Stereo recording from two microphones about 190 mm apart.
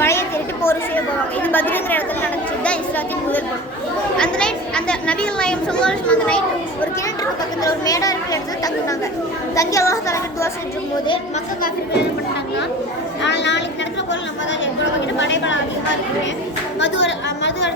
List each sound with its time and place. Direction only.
0.0 s a woman's voice: 15° left (ahead or behind)
4.2 s speech: 5° left (ahead or behind)
7.6 s a woman's voice: 20° left (ahead or behind)
13.2 s a woman's voice: 65° left (ahead or behind)
15.2 s a woman's voice: 75° left (ahead or behind)
16.8 s a woman's voice: 70° left (ahead or behind)